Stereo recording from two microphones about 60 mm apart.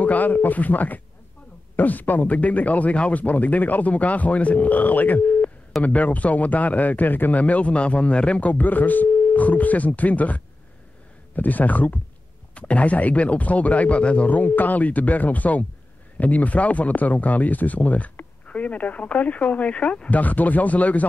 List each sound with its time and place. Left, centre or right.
0.0 s speech: left